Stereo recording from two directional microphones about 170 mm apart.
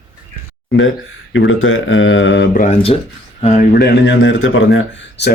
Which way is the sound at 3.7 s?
80° left.